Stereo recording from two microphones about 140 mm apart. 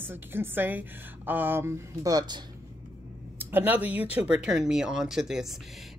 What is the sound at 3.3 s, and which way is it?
Speech, 15° right (ahead or behind).